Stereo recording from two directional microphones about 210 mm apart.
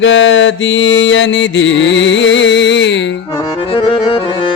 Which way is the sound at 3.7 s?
25° left (ahead or behind).